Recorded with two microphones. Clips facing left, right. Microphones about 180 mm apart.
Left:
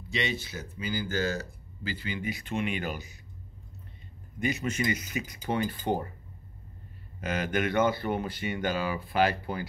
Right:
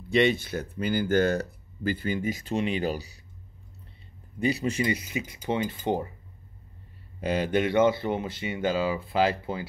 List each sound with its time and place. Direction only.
0.1 s speech: 55° right (ahead or behind); by 3.2 s 35° right (ahead or behind)
4.4 s speech: 30° right (ahead or behind)
7.2 s speech: 30° right (ahead or behind)